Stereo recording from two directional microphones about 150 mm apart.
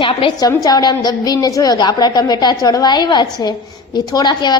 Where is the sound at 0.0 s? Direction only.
35° left (ahead or behind).